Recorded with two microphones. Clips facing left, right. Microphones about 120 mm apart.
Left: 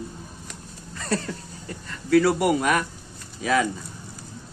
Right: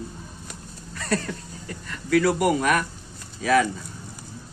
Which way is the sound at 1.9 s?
25° left (ahead or behind).